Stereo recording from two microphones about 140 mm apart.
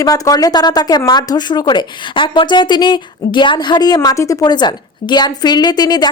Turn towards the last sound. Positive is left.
turn(degrees=30)  # may be behind; listen again after turning